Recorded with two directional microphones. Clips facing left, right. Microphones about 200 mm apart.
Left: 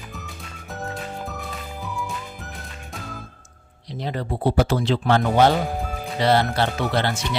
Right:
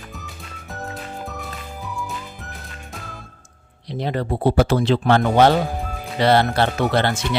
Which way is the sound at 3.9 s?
65° right (ahead or behind).